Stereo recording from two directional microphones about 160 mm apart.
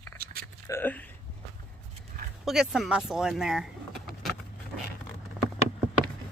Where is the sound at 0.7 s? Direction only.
10° left (ahead or behind).